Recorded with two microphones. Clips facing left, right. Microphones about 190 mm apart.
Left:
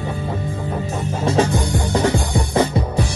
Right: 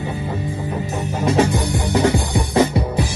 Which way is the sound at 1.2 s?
15° right (ahead or behind).